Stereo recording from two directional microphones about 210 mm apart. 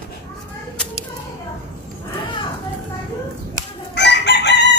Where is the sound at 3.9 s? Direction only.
55° left (ahead or behind).